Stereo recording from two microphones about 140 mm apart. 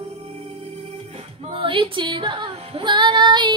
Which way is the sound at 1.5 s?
40° right (ahead or behind).